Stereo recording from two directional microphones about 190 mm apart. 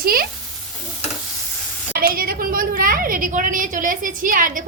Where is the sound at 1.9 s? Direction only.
50° right (ahead or behind).